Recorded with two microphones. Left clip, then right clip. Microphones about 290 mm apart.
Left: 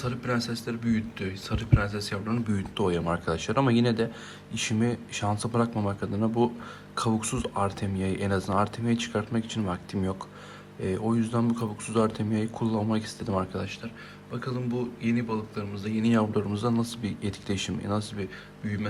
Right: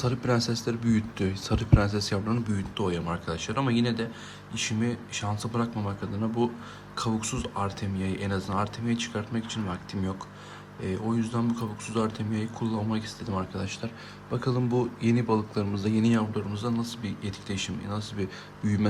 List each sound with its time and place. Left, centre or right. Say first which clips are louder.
0.0 s speech: right 3 dB; centre
14.3 s speech: right 4 dB; centre
18.6 s speech: right 5 dB; centre